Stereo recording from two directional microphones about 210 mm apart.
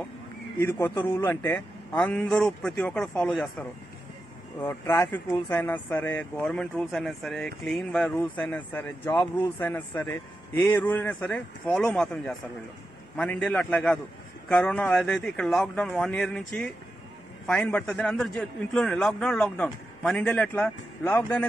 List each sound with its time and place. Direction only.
0.6 s speech: 10° left (ahead or behind)
1.3 s a man's voice: 5° left (ahead or behind)